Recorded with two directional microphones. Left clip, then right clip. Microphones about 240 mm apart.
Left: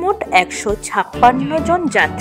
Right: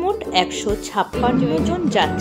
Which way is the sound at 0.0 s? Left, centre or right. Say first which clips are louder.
Left 5 dB; left.